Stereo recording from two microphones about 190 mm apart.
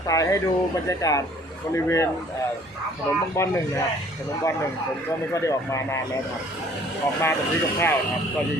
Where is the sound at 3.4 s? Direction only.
15° left (ahead or behind).